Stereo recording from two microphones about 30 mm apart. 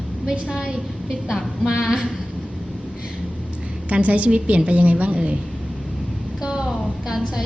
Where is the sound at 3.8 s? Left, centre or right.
Right.